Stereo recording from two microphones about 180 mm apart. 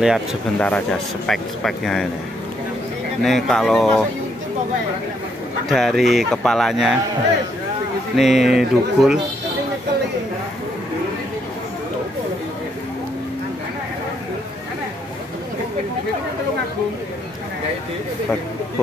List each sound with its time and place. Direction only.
0.6 s speech: 5° left (ahead or behind)
3.2 s speech: centre (ahead or behind)
5.7 s speech: centre (ahead or behind)
8.2 s speech: centre (ahead or behind)